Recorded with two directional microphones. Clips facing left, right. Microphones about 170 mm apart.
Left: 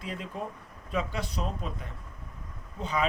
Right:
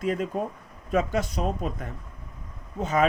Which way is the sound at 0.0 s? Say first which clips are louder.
Right 9 dB; 45° right (ahead or behind).